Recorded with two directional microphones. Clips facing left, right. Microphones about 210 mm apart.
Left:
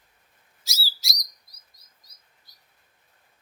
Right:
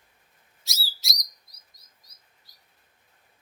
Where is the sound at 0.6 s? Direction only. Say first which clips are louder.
Left 2 dB; centre (ahead or behind).